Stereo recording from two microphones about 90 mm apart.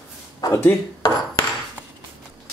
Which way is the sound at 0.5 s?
25° left (ahead or behind).